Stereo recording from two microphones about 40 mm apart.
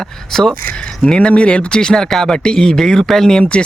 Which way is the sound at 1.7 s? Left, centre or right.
Centre.